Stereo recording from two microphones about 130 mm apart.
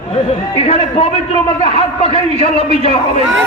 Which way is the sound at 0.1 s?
50° left (ahead or behind).